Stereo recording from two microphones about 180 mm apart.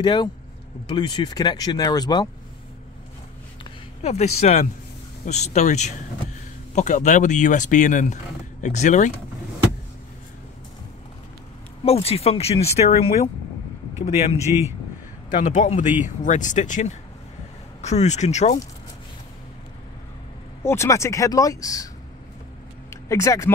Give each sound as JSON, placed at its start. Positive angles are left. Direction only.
{"t": 0.0, "sound": "speech", "side_deg": 25}
{"t": 4.0, "sound": "speech", "side_deg": 40}
{"t": 11.8, "sound": "speech", "side_deg": 35}
{"t": 20.6, "sound": "speech", "side_deg": 15}
{"t": 22.8, "sound": "speech", "side_deg": 15}